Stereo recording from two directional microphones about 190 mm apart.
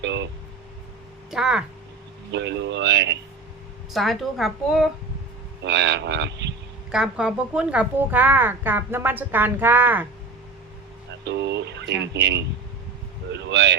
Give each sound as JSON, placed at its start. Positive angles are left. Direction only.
{"t": 0.0, "sound": "speech", "side_deg": -65}
{"t": 1.3, "sound": "a woman's voice", "side_deg": -5}
{"t": 2.3, "sound": "speech", "side_deg": -65}
{"t": 3.9, "sound": "a woman's voice", "side_deg": 0}
{"t": 5.6, "sound": "speech", "side_deg": -65}
{"t": 6.9, "sound": "a woman's voice", "side_deg": -5}
{"t": 11.3, "sound": "speech", "side_deg": -65}